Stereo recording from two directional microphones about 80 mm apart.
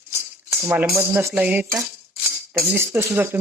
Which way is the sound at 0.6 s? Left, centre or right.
Right.